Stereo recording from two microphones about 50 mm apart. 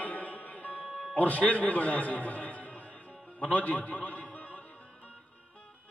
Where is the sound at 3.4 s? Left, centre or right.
Left.